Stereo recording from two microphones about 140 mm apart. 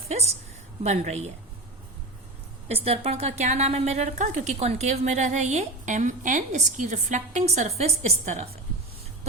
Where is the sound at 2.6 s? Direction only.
45° right (ahead or behind).